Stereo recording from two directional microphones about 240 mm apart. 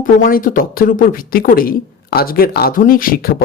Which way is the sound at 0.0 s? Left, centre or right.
Left.